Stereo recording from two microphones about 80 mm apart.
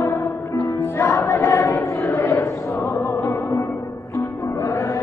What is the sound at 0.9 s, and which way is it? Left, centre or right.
Music, left.